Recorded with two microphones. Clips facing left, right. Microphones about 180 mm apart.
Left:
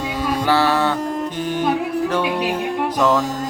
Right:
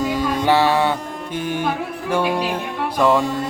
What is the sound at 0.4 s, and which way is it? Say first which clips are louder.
Speech: right 1 dB; 15° right (ahead or behind).